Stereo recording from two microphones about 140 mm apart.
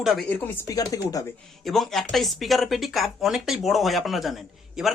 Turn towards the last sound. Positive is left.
turn(degrees=0)  # may be behind; listen again after turning